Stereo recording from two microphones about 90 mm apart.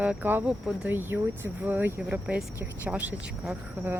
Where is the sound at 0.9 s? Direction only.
20° right (ahead or behind).